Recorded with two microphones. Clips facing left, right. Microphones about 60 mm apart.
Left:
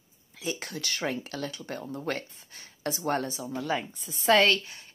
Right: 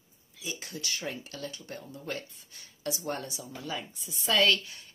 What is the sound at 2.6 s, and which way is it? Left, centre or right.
A woman's voice, left.